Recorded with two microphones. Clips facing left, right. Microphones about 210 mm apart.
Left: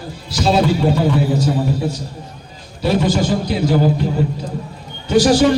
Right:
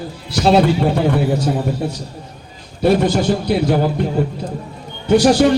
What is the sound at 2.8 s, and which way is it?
A man's voice, 55° right (ahead or behind).